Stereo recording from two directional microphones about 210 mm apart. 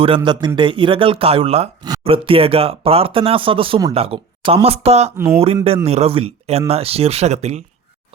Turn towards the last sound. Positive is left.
turn(degrees=-30)  # may be behind; listen again after turning